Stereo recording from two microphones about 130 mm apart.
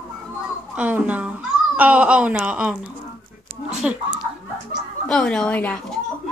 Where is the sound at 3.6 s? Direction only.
5° right (ahead or behind).